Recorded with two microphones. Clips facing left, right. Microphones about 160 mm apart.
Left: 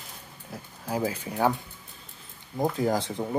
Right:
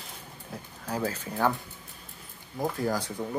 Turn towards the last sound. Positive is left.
turn(degrees=25)  # may be behind; listen again after turning